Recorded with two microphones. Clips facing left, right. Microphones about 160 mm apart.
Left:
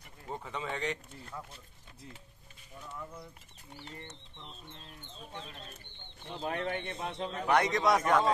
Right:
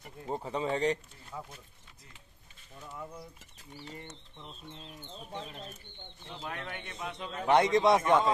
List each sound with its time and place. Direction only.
0.3 s speech: 35° right (ahead or behind)
1.3 s speech: 15° right (ahead or behind)
6.4 s a man's voice: 35° left (ahead or behind)
7.4 s a man's voice: 25° right (ahead or behind)